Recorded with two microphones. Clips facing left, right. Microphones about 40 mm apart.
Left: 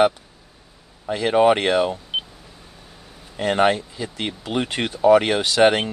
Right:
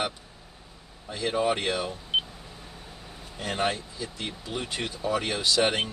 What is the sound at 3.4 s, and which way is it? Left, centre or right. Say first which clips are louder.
Speech: left 10 dB; left.